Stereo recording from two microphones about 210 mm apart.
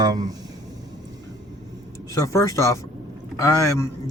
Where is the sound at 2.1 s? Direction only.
15° left (ahead or behind).